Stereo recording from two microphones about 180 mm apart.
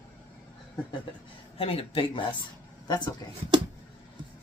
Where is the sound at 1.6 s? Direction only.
30° left (ahead or behind).